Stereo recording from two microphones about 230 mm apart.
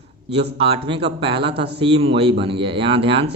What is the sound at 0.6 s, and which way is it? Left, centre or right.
A man's voice, right.